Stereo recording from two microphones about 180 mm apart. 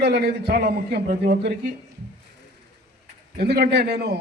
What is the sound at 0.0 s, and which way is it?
A man's voice, 65° right (ahead or behind).